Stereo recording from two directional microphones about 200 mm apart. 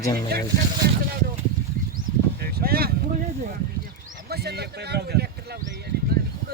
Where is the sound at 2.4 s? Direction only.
50° right (ahead or behind).